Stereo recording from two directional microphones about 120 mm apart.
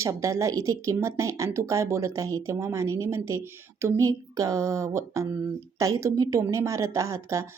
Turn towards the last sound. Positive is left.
turn(degrees=-25)  # may be behind; listen again after turning